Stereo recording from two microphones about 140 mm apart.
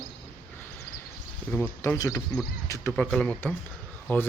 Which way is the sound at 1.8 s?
25° left (ahead or behind).